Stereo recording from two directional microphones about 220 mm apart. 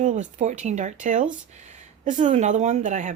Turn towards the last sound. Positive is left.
turn(degrees=-35)  # may be behind; listen again after turning